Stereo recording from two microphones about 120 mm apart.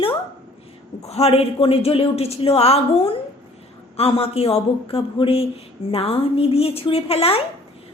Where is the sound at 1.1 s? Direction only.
60° left (ahead or behind).